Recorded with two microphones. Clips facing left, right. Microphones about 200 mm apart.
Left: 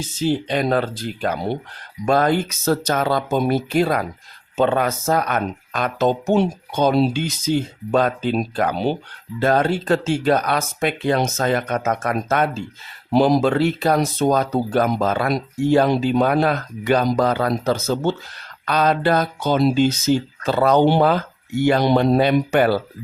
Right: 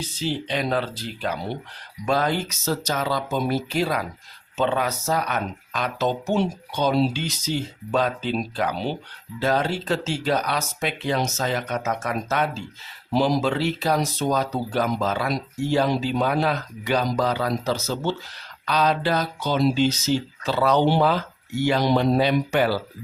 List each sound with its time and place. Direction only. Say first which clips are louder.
0.0 s speech: left 6 dB; 45° left (ahead or behind)